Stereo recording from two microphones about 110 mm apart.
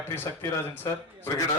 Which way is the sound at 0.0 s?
20° left (ahead or behind).